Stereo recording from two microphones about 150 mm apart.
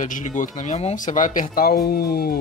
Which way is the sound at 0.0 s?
60° left (ahead or behind).